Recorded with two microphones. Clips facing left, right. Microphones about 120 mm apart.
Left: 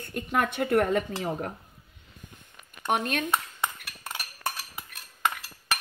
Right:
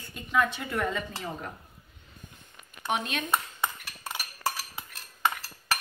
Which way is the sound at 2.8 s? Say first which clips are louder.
Left 3 dB; 50° left (ahead or behind).